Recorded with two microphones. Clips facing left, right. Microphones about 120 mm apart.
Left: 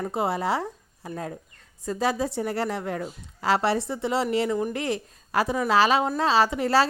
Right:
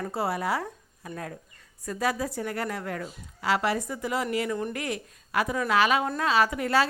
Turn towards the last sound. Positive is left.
turn(degrees=30)  # may be behind; listen again after turning